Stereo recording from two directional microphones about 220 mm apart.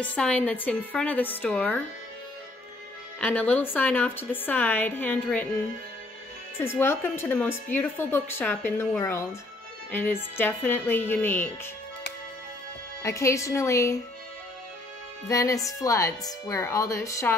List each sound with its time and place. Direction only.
0.0 s a woman's voice: 5° left (ahead or behind)
3.2 s a woman's voice: 5° left (ahead or behind)
6.8 s a woman's voice: 10° left (ahead or behind)
13.0 s a woman's voice: 15° left (ahead or behind)
15.2 s a woman's voice: 15° left (ahead or behind)